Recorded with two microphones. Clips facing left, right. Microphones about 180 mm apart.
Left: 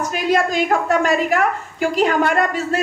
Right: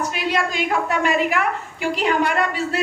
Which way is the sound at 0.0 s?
45° left (ahead or behind).